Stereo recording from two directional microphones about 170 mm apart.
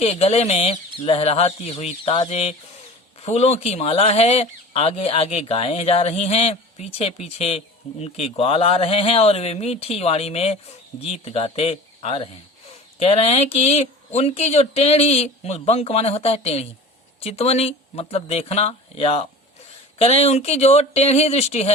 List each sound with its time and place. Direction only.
0.0 s speech: 40° left (ahead or behind)